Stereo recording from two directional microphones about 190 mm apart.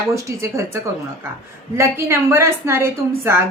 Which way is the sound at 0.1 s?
15° right (ahead or behind).